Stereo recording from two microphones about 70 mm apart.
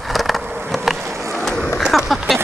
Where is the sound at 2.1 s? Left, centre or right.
Centre.